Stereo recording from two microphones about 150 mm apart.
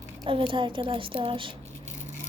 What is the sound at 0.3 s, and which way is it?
A woman's voice, 35° right (ahead or behind).